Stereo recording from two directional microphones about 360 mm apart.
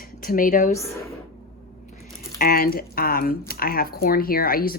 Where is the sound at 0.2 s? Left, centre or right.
Left.